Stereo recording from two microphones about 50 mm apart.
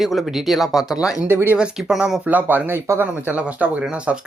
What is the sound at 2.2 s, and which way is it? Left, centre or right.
Speech, right.